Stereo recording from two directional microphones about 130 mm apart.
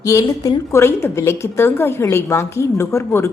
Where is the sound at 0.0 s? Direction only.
25° left (ahead or behind).